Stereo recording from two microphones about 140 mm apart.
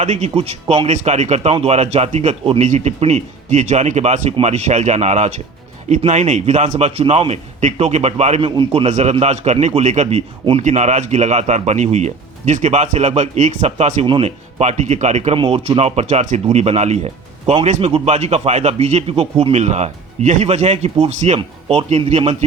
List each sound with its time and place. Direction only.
0.0 s speech: 55° right (ahead or behind)
8.4 s a man's voice: 40° right (ahead or behind)
8.9 s a man's voice: 55° right (ahead or behind)
10.6 s speech: 55° right (ahead or behind)